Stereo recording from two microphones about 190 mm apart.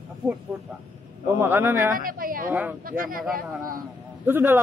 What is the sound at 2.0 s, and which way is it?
A woman's voice, 45° right (ahead or behind).